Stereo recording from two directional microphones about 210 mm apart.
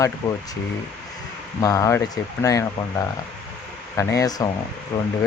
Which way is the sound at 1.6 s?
15° left (ahead or behind).